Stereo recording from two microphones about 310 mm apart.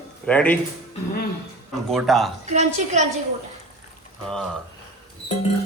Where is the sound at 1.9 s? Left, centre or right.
Centre.